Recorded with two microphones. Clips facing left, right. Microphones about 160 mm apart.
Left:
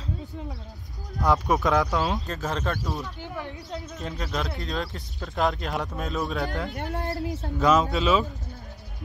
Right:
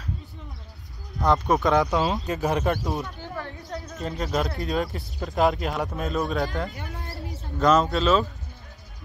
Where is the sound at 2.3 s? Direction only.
15° right (ahead or behind).